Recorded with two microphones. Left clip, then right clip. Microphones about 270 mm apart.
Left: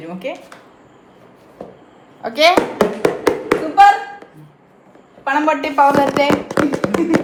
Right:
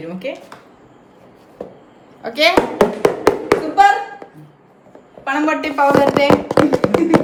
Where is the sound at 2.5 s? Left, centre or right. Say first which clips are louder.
Right 1 dB; centre.